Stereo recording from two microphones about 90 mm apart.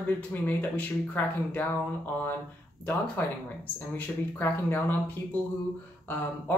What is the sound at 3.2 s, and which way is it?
Speech, 25° left (ahead or behind).